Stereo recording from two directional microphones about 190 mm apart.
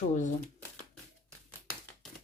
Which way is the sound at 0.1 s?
40° left (ahead or behind).